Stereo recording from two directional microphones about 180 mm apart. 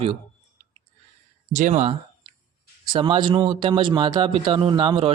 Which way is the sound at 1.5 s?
40° right (ahead or behind).